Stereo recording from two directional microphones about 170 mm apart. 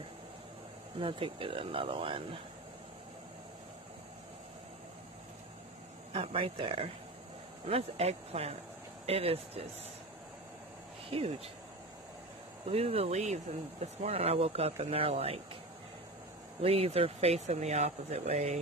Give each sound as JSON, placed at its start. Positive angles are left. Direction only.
{"t": 0.9, "sound": "speech", "side_deg": -30}
{"t": 6.1, "sound": "speech", "side_deg": -30}
{"t": 11.1, "sound": "speech", "side_deg": -35}
{"t": 12.6, "sound": "speech", "side_deg": -35}
{"t": 16.6, "sound": "speech", "side_deg": -35}